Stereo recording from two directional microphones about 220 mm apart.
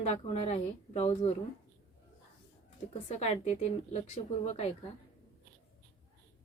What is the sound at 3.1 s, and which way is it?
A woman's voice, 30° left (ahead or behind).